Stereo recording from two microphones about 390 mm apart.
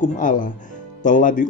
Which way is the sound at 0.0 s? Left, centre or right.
Centre.